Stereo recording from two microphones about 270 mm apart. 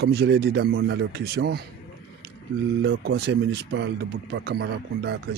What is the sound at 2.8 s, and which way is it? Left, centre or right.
Speech, right.